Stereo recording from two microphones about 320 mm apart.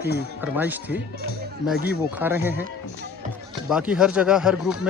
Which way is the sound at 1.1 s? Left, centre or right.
Right.